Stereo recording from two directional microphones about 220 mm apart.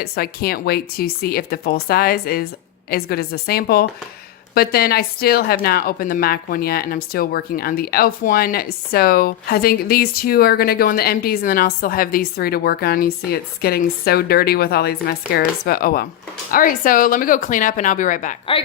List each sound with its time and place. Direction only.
0.0 s speech: 45° left (ahead or behind)